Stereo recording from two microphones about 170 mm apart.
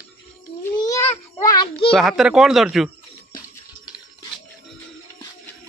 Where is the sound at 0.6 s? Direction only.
20° left (ahead or behind).